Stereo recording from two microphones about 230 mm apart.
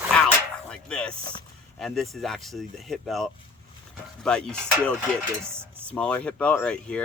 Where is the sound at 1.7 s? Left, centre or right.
Centre.